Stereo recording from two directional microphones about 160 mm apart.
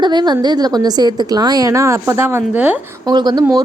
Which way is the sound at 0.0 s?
25° right (ahead or behind).